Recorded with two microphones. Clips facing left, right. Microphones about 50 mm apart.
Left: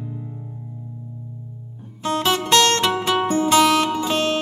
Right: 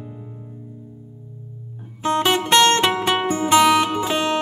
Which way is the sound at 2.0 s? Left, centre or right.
Centre.